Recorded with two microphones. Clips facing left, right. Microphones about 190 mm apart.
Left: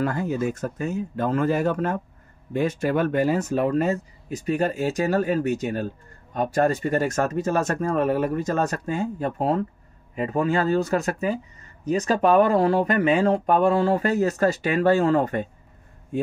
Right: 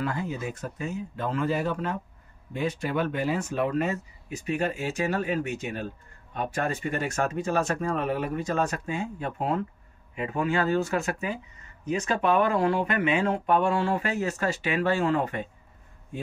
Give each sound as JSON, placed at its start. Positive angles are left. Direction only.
{"t": 0.0, "sound": "speech", "side_deg": 45}